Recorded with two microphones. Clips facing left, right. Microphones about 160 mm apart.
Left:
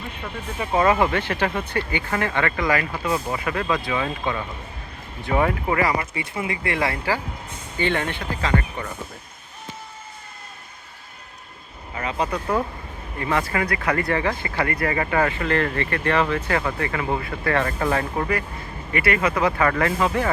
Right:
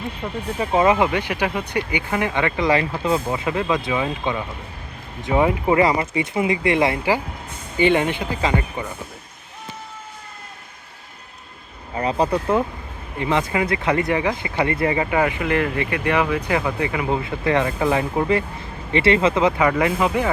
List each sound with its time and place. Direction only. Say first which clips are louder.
0.6 s speech: right 2 dB; 20° right (ahead or behind)
11.9 s speech: right 5 dB; 35° right (ahead or behind)
13.1 s speech: right 3 dB; 20° right (ahead or behind)